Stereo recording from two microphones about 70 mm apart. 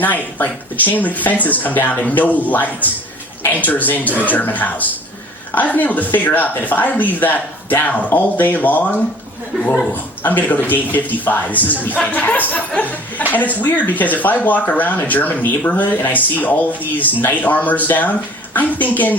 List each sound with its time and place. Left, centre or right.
0.0 s speech: left